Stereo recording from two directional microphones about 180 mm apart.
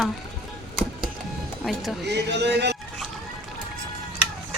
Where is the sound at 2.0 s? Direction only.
70° right (ahead or behind).